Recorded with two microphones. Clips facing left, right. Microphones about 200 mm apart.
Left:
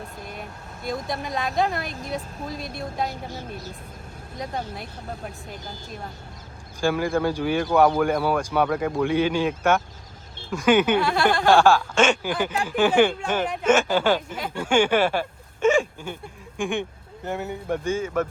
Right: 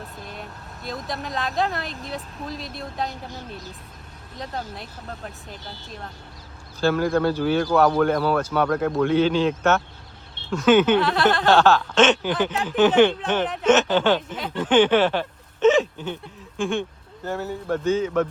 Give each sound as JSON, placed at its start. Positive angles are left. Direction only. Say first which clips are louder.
{"t": 0.3, "sound": "speech", "louder": "left 1 dB", "side_deg": 0}
{"t": 2.6, "sound": "speech", "louder": "left 1 dB", "side_deg": 50}
{"t": 2.9, "sound": "speech", "louder": "left 1 dB", "side_deg": 0}
{"t": 4.4, "sound": "speech", "louder": "left 1 dB", "side_deg": 0}
{"t": 5.6, "sound": "speech", "louder": "left 1 dB", "side_deg": 45}
{"t": 6.7, "sound": "speech", "louder": "right 2 dB", "side_deg": 10}
{"t": 11.0, "sound": "speech", "louder": "right 1 dB", "side_deg": 0}
{"t": 11.4, "sound": "speech", "louder": "left 2 dB", "side_deg": 10}